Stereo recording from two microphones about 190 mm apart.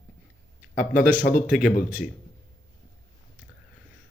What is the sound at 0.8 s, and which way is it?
Speech, 45° left (ahead or behind).